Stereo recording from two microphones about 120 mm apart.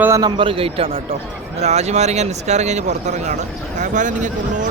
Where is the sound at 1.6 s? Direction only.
65° right (ahead or behind).